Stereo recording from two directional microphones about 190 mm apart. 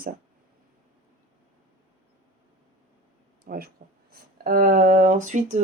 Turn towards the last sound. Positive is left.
turn(degrees=-40)  # may be behind; listen again after turning